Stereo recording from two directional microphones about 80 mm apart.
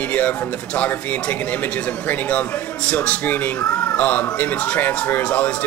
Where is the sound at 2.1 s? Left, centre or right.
Centre.